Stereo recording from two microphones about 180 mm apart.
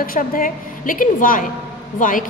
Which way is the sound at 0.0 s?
50° left (ahead or behind).